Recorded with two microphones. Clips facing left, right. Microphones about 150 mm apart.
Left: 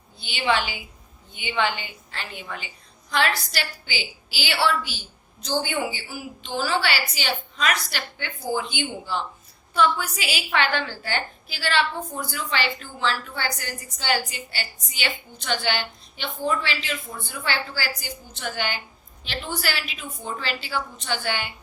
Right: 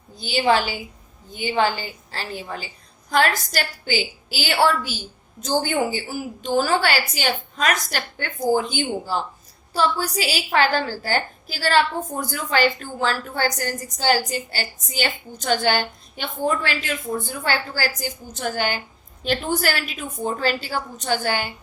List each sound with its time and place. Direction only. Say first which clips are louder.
0.2 s a woman's voice: right 5 dB; 40° right (ahead or behind)